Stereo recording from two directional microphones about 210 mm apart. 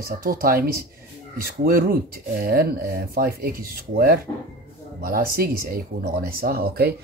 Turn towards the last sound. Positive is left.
turn(degrees=-45)  # may be behind; listen again after turning